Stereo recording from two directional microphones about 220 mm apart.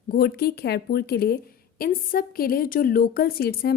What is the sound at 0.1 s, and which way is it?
A woman's voice, 45° left (ahead or behind).